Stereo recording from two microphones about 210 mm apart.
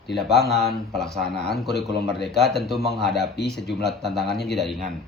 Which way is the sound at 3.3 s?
50° left (ahead or behind).